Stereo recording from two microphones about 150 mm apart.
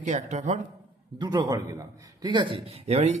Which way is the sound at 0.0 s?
50° right (ahead or behind).